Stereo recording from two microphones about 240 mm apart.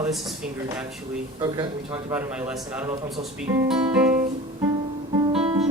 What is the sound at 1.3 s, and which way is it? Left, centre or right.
Speech, centre.